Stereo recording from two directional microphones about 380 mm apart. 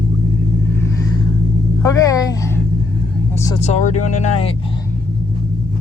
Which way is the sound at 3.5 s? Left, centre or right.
Centre.